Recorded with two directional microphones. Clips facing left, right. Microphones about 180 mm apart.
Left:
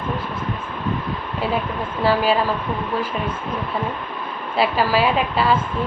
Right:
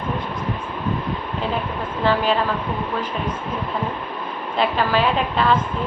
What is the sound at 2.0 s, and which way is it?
Speech, 10° left (ahead or behind).